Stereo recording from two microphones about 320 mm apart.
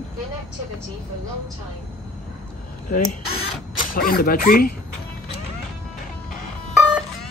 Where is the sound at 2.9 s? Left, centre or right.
Left.